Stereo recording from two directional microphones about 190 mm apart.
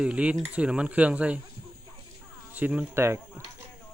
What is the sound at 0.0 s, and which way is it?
Speech, 5° right (ahead or behind).